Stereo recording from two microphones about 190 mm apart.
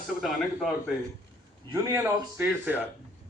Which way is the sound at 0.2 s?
Centre (ahead or behind).